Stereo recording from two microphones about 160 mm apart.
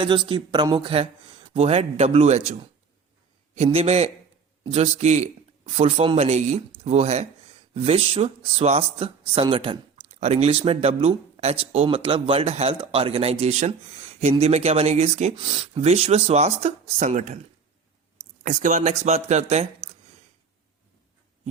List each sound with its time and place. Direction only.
0.0 s speech: 30° right (ahead or behind)
18.4 s speech: 50° right (ahead or behind)